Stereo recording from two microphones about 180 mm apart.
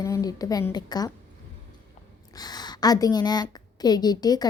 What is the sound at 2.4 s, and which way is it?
Speech, 20° left (ahead or behind).